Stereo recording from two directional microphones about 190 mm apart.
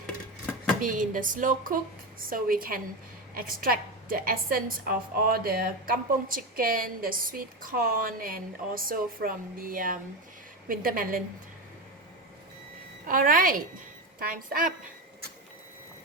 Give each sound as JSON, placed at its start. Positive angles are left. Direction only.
{"t": 0.8, "sound": "a woman's voice", "side_deg": -45}
{"t": 13.1, "sound": "a woman's voice", "side_deg": -45}